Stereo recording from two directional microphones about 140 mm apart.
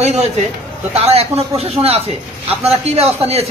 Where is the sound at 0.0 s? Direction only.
50° right (ahead or behind).